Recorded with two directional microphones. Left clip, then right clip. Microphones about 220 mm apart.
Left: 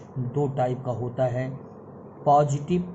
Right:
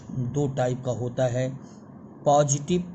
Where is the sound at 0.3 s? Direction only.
50° right (ahead or behind).